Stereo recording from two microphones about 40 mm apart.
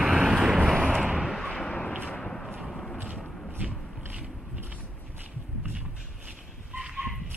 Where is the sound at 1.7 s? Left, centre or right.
Left.